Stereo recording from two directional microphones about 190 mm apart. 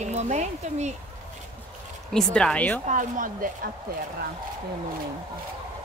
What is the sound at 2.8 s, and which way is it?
Speech, 40° right (ahead or behind).